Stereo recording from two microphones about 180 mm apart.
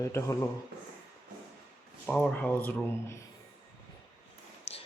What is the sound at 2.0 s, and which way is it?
Speech, 5° left (ahead or behind).